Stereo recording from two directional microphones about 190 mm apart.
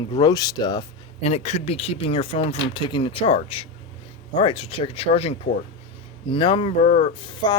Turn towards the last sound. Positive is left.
turn(degrees=25)  # may be behind; listen again after turning